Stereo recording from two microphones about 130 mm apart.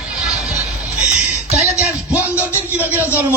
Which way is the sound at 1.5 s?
10° right (ahead or behind).